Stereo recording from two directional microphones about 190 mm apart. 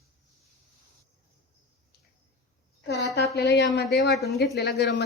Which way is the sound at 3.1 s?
60° left (ahead or behind).